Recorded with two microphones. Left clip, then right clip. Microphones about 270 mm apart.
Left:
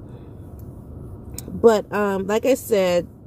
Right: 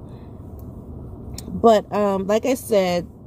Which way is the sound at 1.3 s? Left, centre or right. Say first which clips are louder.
Right 1 dB; centre.